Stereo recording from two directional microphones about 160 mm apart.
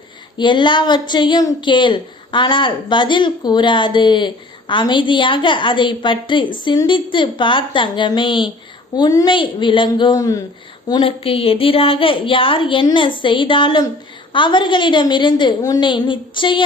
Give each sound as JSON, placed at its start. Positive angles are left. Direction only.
{"t": 0.3, "sound": "a woman's voice", "side_deg": 30}